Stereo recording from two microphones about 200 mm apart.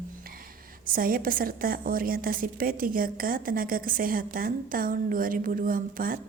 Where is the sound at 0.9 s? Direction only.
45° right (ahead or behind).